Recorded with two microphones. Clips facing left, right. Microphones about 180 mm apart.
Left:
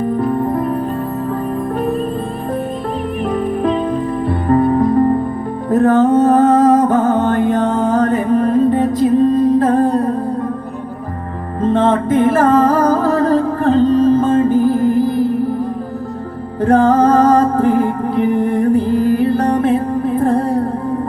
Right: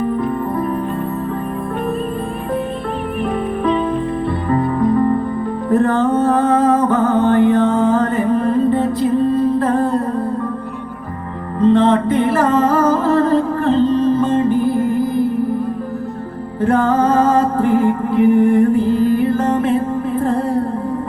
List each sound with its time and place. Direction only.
3.3 s music: 40° left (ahead or behind)
11.6 s music: 45° left (ahead or behind)
16.6 s music: 40° left (ahead or behind)